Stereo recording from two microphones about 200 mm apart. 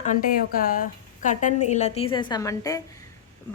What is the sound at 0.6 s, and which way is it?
A woman's voice, 45° left (ahead or behind).